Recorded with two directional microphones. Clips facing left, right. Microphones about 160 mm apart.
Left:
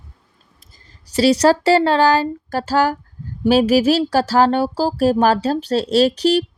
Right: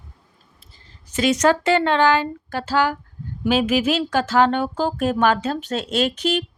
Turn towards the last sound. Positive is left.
turn(degrees=35)  # may be behind; listen again after turning